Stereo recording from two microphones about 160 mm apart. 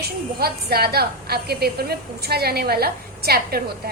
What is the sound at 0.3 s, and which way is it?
A woman's voice, 75° right (ahead or behind).